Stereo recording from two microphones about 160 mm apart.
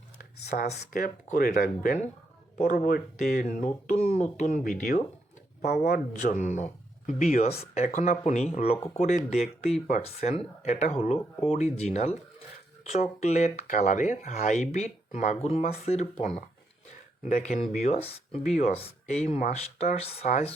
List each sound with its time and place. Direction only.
0.5 s speech: 75° left (ahead or behind)
2.6 s speech: 60° left (ahead or behind)
5.6 s speech: 75° left (ahead or behind); by 20.5 s 45° left (ahead or behind)